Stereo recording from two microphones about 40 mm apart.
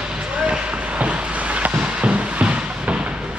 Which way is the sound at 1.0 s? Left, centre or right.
Right.